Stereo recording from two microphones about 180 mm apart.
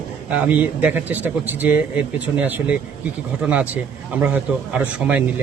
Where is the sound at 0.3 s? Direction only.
10° right (ahead or behind).